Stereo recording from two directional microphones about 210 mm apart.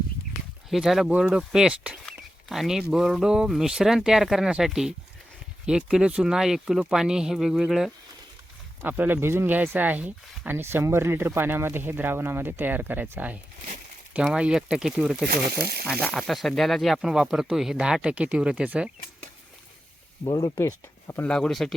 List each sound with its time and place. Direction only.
0.7 s speech: centre (ahead or behind)
15.3 s speech: 45° right (ahead or behind)
15.9 s speech: 5° left (ahead or behind)
20.3 s speech: 15° left (ahead or behind)